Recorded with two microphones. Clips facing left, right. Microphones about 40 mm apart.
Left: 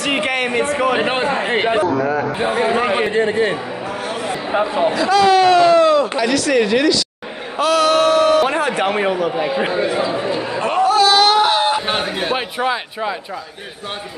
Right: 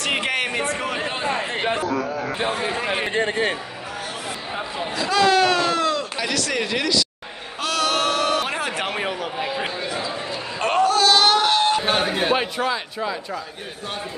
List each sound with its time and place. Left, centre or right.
0.0 s a sound: centre
0.9 s a man's voice: left
4.5 s a man's voice: left
4.9 s a man's voice: centre; by 10.7 s left
10.9 s a sound: centre
12.0 s a man's voice: centre
12.5 s a man's voice: left